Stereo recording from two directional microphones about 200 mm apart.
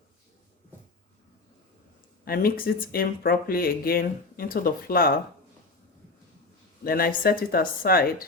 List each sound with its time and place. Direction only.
2.2 s speech: 50° left (ahead or behind)
6.8 s speech: 50° left (ahead or behind)